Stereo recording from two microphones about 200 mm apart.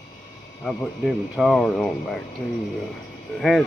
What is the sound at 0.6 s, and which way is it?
Speech, 5° left (ahead or behind).